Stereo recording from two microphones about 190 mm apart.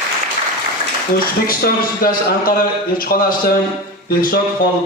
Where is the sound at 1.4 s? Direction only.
50° left (ahead or behind).